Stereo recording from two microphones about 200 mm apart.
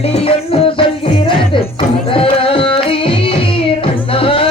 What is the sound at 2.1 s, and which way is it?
Carnatic music, 25° left (ahead or behind).